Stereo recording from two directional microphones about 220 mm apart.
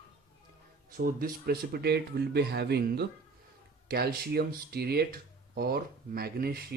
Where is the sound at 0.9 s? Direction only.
40° right (ahead or behind).